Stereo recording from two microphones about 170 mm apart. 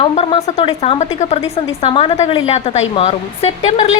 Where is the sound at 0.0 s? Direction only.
30° left (ahead or behind).